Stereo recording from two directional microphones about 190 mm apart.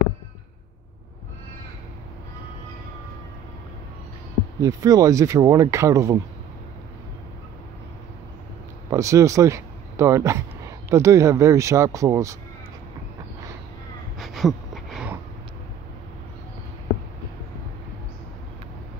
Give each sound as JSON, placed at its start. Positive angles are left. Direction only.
{"t": 4.6, "sound": "speech", "side_deg": -20}
{"t": 8.9, "sound": "speech", "side_deg": -15}
{"t": 14.1, "sound": "a sound", "side_deg": 0}